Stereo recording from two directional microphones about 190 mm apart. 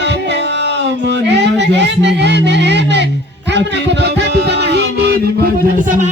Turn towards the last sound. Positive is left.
turn(degrees=-40)  # may be behind; listen again after turning